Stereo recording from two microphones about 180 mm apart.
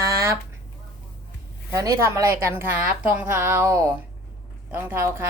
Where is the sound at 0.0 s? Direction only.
15° right (ahead or behind).